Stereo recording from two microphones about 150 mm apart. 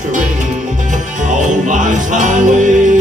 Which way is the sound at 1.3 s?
55° right (ahead or behind).